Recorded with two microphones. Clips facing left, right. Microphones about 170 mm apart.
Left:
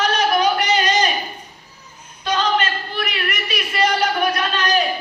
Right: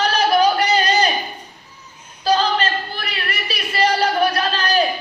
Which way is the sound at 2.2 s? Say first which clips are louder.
Right 2 dB; 35° right (ahead or behind).